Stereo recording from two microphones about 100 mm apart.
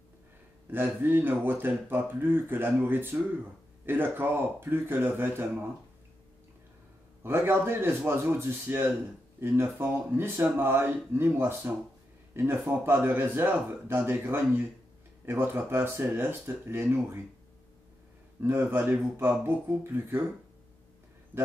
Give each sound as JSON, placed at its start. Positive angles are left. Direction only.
{"t": 0.7, "sound": "speech", "side_deg": -20}
{"t": 7.2, "sound": "speech", "side_deg": -20}
{"t": 18.4, "sound": "speech", "side_deg": -20}